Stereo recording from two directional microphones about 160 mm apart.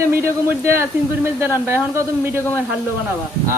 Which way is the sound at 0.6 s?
15° right (ahead or behind).